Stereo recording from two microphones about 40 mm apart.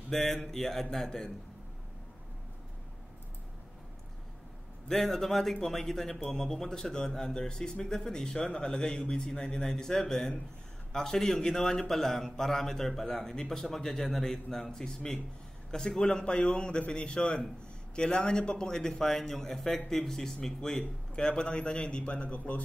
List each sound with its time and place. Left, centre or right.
0.1 s speech: centre
4.8 s a man's voice: centre; by 22.6 s left